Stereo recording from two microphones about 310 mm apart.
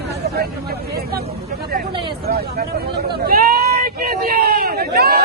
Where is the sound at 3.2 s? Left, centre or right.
Right.